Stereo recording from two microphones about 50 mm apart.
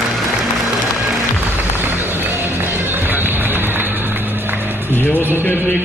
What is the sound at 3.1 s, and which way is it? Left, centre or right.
Music, right.